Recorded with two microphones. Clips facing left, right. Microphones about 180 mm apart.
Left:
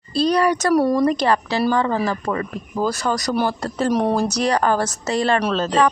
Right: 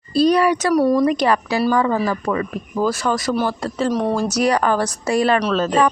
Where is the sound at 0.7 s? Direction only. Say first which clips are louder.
Right 1 dB; centre (ahead or behind).